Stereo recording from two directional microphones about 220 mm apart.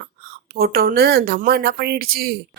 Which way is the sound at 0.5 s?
45° right (ahead or behind).